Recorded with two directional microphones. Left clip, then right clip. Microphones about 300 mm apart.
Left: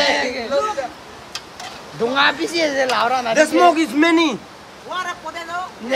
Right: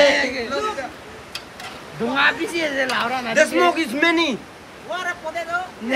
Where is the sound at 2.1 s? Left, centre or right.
Left.